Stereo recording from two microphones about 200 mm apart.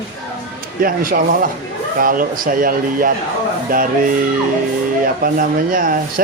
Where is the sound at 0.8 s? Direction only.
45° right (ahead or behind).